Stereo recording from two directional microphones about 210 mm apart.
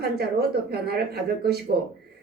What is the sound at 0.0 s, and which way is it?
Speech, 50° right (ahead or behind).